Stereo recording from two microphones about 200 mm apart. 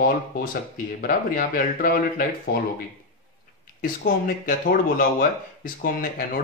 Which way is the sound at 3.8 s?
45° left (ahead or behind).